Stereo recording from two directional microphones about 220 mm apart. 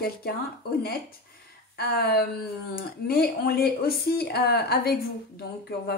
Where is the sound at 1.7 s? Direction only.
45° left (ahead or behind).